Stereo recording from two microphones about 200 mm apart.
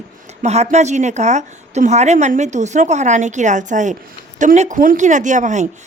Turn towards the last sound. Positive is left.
turn(degrees=-35)  # may be behind; listen again after turning